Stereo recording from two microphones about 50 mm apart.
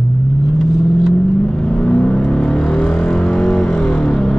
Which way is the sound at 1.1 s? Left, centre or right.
Left.